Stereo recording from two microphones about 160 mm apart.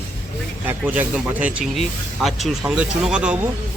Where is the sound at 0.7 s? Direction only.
10° right (ahead or behind).